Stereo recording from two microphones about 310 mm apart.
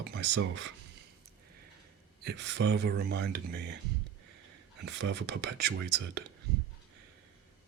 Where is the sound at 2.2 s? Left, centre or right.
Right.